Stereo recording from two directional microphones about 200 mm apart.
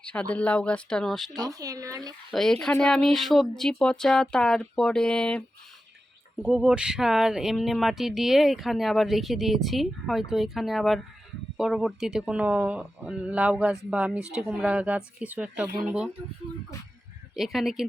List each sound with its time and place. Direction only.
0.0 s speech: 5° left (ahead or behind)
1.4 s speech: 15° right (ahead or behind)
2.3 s speech: centre (ahead or behind)
6.4 s speech: 5° right (ahead or behind)
17.3 s speech: centre (ahead or behind)